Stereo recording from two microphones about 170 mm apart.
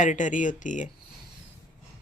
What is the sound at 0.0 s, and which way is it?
Speech, 45° left (ahead or behind).